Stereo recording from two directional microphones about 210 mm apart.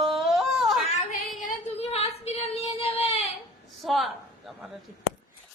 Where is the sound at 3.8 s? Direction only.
Centre (ahead or behind).